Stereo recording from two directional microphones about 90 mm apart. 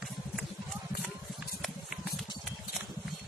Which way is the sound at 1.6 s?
Centre (ahead or behind).